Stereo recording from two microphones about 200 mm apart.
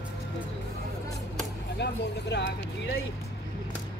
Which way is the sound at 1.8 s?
60° left (ahead or behind).